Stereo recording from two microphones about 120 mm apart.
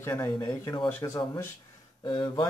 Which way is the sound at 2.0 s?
40° left (ahead or behind).